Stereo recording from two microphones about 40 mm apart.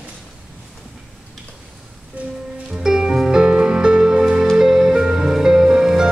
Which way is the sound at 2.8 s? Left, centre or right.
Centre.